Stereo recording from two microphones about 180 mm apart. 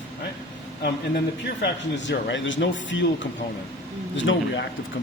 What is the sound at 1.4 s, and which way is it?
Speech, 80° left.